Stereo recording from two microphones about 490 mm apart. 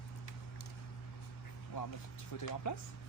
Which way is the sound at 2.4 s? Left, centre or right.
Left.